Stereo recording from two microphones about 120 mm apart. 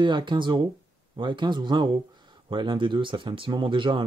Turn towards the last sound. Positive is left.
turn(degrees=-45)  # may be behind; listen again after turning